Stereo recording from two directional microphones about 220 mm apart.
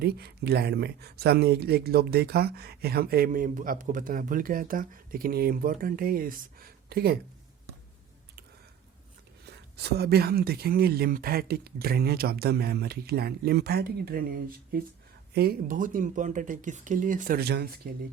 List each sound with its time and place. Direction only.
0.0 s speech: 45° right (ahead or behind)
9.5 s speech: 50° right (ahead or behind)